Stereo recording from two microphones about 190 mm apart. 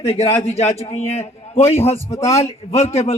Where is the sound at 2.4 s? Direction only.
35° left (ahead or behind).